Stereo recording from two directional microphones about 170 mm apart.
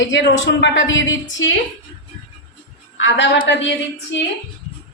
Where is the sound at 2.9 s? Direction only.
90° left.